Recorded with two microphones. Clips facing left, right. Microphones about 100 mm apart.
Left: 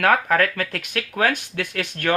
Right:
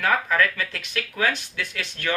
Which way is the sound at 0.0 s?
55° left (ahead or behind).